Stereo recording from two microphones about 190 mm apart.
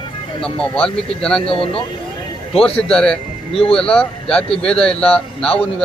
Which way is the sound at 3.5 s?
30° left (ahead or behind).